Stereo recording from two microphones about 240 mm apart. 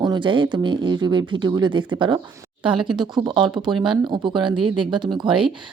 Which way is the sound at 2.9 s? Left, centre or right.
Centre.